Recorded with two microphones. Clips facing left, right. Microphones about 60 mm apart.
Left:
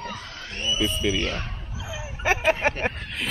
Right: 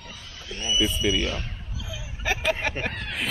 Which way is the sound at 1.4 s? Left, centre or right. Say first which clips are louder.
Left 3 dB; left.